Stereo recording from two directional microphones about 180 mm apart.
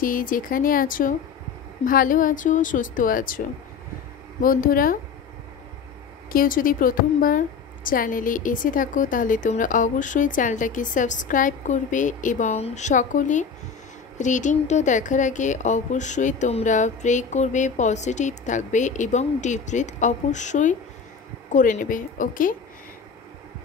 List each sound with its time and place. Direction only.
0.0 s a woman's voice: 50° left (ahead or behind)
6.3 s a woman's voice: 50° left (ahead or behind)